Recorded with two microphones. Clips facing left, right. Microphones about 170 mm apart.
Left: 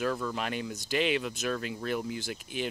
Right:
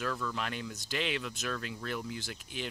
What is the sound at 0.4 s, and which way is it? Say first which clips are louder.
Speech: left 4 dB; 10° left (ahead or behind).